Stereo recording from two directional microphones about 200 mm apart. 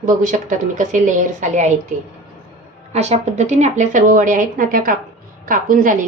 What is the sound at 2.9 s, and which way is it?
A woman's voice, 35° right (ahead or behind).